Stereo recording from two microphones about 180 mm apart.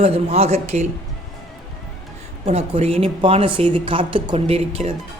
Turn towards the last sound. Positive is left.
turn(degrees=-35)  # may be behind; listen again after turning